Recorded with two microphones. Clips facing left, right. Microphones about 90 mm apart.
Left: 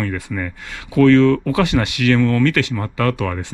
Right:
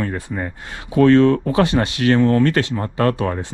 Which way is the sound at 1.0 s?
25° right (ahead or behind).